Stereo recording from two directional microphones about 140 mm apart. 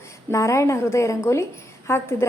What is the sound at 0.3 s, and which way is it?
A woman's voice, 20° left (ahead or behind).